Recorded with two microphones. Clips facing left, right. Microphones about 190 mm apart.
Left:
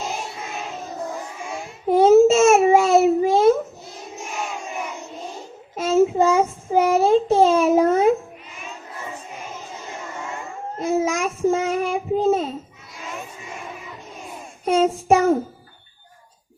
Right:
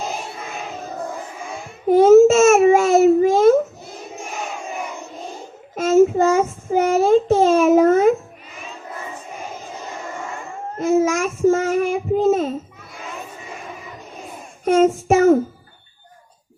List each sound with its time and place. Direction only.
1.6 s a sound: 50° right (ahead or behind)
5.7 s child singing: 50° right (ahead or behind)
10.8 s child singing: 50° right (ahead or behind)
14.6 s child singing: 50° right (ahead or behind)